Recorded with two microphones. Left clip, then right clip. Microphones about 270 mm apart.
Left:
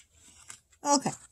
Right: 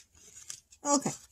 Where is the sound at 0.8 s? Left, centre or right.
Centre.